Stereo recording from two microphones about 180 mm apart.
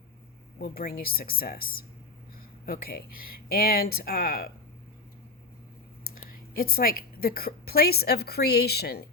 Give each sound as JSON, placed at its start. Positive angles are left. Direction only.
{"t": 0.6, "sound": "speech", "side_deg": 55}
{"t": 6.1, "sound": "a woman's voice", "side_deg": 55}